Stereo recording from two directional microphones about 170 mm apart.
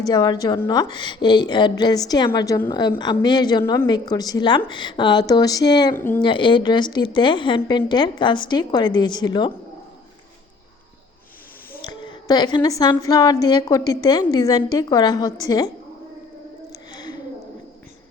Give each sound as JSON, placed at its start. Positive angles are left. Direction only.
{"t": 0.0, "sound": "a woman's voice", "side_deg": 25}
{"t": 3.6, "sound": "a woman's voice", "side_deg": 15}
{"t": 3.8, "sound": "a woman's voice", "side_deg": 25}
{"t": 6.0, "sound": "a woman's voice", "side_deg": 10}
{"t": 6.2, "sound": "a woman's voice", "side_deg": 30}
{"t": 11.8, "sound": "a woman's voice", "side_deg": 30}
{"t": 16.7, "sound": "a sound", "side_deg": 25}